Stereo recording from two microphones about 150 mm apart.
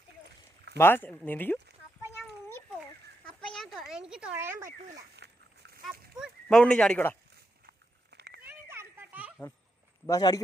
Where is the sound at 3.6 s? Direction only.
Centre (ahead or behind); by 4.7 s 15° right (ahead or behind).